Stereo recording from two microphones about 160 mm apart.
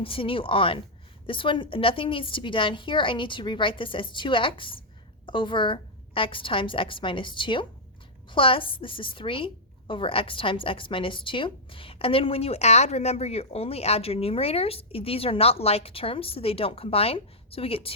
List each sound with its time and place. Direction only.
0.0 s a woman's voice: 35° left (ahead or behind)